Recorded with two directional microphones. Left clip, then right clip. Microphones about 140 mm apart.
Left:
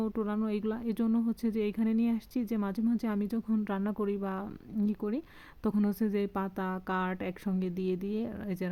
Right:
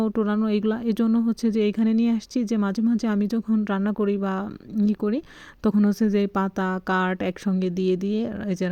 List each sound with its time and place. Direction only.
0.0 s a woman's voice: 35° right (ahead or behind)